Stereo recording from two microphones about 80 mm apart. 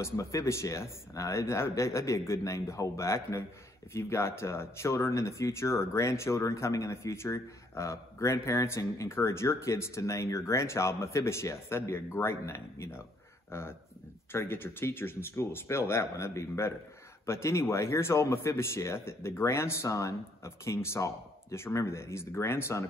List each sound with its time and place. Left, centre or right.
0.0 s speech: left